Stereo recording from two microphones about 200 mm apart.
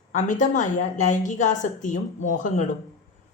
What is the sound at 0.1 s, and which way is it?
A woman's voice, 40° left (ahead or behind).